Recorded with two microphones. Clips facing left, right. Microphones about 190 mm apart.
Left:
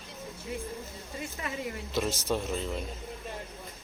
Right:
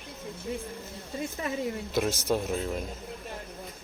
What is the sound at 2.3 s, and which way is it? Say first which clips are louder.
Speech: right 3 dB; 5° right (ahead or behind).